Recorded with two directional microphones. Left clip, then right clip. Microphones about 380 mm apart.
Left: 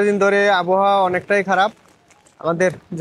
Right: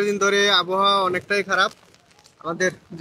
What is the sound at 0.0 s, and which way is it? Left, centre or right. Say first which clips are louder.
Speech: left 4 dB; left.